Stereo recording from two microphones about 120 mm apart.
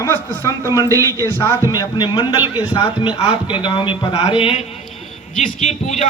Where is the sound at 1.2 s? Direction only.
25° left (ahead or behind).